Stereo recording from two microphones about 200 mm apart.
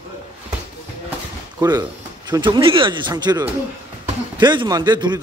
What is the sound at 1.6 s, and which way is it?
Speech, 20° right (ahead or behind).